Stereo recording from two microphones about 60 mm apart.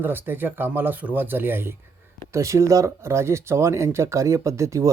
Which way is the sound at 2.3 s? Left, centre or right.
Right.